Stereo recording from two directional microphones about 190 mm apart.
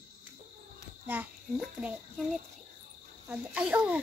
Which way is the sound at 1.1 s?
5° right (ahead or behind).